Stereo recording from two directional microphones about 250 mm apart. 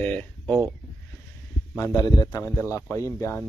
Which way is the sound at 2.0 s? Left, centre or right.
Centre.